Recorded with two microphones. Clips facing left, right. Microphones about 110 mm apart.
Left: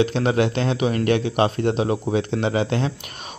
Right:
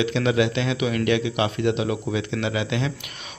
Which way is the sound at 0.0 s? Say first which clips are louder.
Left 2 dB; 40° left (ahead or behind).